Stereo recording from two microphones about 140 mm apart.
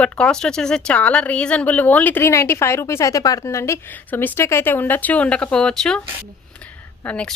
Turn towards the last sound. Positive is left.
turn(degrees=10)  # may be behind; listen again after turning